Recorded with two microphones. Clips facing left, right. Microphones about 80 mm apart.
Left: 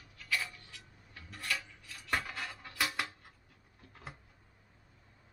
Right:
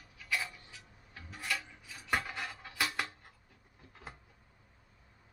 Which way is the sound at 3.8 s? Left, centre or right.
Centre.